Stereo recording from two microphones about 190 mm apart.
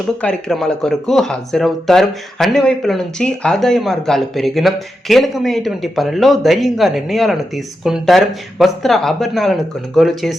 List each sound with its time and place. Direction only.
0.2 s speech: 5° left (ahead or behind)